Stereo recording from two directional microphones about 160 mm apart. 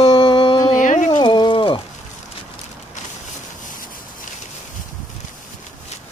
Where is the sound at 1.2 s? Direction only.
30° left (ahead or behind).